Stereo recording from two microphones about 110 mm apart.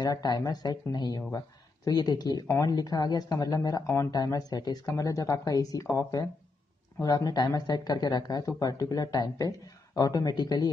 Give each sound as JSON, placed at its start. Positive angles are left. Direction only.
{"t": 0.0, "sound": "speech", "side_deg": 40}
{"t": 7.0, "sound": "speech", "side_deg": 35}